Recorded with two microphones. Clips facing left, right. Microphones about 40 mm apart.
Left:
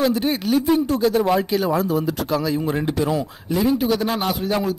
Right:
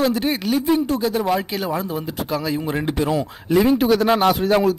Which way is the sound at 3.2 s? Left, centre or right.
Right.